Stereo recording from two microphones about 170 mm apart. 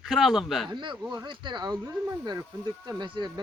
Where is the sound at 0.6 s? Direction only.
25° right (ahead or behind).